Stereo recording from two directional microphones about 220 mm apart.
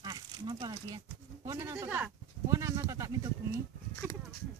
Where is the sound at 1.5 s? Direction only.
15° right (ahead or behind).